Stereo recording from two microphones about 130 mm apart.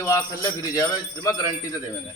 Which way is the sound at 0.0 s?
20° left (ahead or behind).